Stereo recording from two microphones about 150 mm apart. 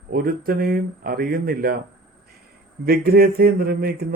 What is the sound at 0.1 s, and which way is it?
Speech, 85° right.